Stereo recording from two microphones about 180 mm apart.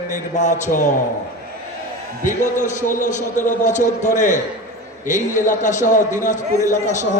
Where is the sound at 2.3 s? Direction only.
45° left (ahead or behind).